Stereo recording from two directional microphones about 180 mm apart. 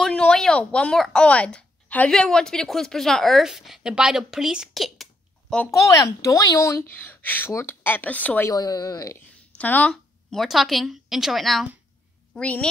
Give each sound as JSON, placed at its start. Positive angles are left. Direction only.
{"t": 0.0, "sound": "speech", "side_deg": 5}
{"t": 5.7, "sound": "speech", "side_deg": 15}
{"t": 9.6, "sound": "a woman's voice", "side_deg": 10}